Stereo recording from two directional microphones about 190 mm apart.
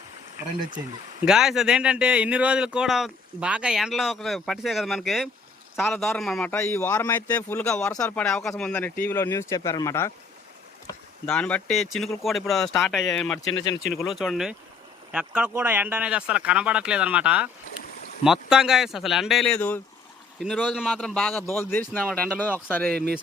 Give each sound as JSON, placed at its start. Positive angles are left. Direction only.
{"t": 0.4, "sound": "a man's voice", "side_deg": -10}
{"t": 7.9, "sound": "a man's voice", "side_deg": 15}
{"t": 8.2, "sound": "a man's voice", "side_deg": 5}
{"t": 11.3, "sound": "a man's voice", "side_deg": 5}
{"t": 22.9, "sound": "speech", "side_deg": -55}